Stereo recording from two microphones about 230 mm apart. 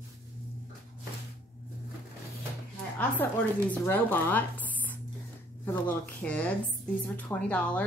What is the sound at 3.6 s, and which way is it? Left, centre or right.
A woman's voice, centre.